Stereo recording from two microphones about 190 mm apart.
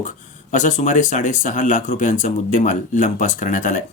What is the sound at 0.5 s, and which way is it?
Speech, 40° left (ahead or behind).